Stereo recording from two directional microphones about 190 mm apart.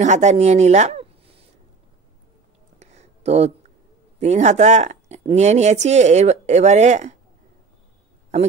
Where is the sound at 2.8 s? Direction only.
35° right (ahead or behind).